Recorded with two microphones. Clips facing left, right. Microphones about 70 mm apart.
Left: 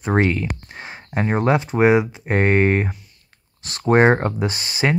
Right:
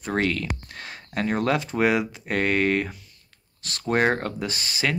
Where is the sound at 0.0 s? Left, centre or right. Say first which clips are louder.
Left 6 dB; left.